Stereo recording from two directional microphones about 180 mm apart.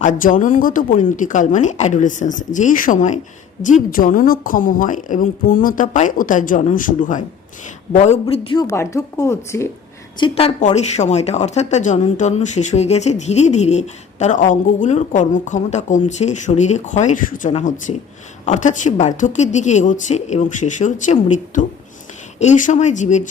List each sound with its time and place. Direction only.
0.0 s a woman's voice: 45° left (ahead or behind)
8.6 s speech: 15° left (ahead or behind)
10.2 s a woman's voice: 30° left (ahead or behind)